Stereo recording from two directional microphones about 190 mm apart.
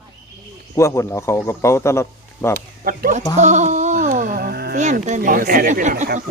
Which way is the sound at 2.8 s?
45° right (ahead or behind).